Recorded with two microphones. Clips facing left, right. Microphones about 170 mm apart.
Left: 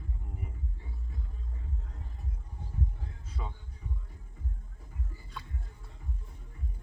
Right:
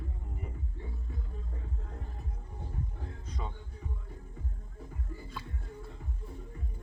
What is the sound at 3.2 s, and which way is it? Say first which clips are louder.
Music: right 1 dB; 5° left (ahead or behind).